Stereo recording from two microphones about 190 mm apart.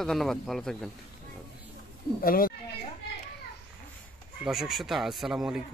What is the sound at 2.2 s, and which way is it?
Speech, 50° left (ahead or behind).